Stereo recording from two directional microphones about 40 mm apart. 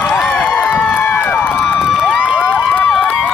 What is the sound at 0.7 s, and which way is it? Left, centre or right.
Run, left.